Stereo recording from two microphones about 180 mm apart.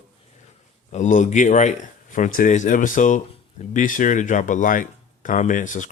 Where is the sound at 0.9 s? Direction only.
45° left (ahead or behind).